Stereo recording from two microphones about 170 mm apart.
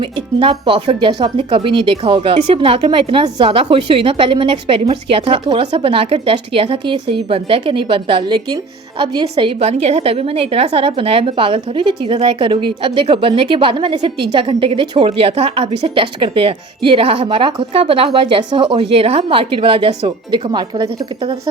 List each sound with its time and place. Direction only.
0.0 s a woman's voice: 30° right (ahead or behind)